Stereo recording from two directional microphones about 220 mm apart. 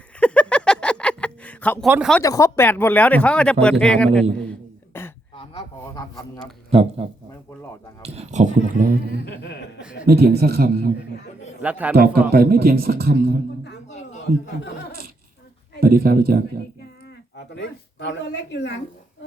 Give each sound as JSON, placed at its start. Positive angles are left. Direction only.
{"t": 0.2, "sound": "a sound", "side_deg": 5}
{"t": 1.9, "sound": "speech", "side_deg": 0}
{"t": 2.2, "sound": "speech", "side_deg": 15}
{"t": 4.9, "sound": "a sound", "side_deg": 10}
{"t": 6.7, "sound": "a man's voice", "side_deg": -25}
{"t": 9.4, "sound": "chuckle", "side_deg": 55}
{"t": 10.1, "sound": "speech", "side_deg": -45}
{"t": 11.6, "sound": "speech", "side_deg": -5}
{"t": 11.9, "sound": "speech", "side_deg": -45}
{"t": 13.9, "sound": "a sound", "side_deg": 30}
{"t": 15.8, "sound": "speech", "side_deg": -40}
{"t": 17.5, "sound": "speech", "side_deg": 55}